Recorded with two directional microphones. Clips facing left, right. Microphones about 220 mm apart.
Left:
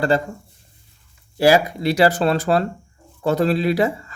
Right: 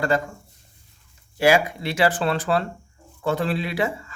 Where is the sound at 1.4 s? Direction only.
35° left (ahead or behind).